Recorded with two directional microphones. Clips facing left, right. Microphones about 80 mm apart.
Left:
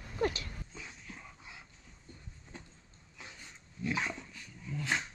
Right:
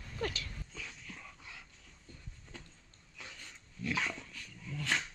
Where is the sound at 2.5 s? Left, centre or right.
Left.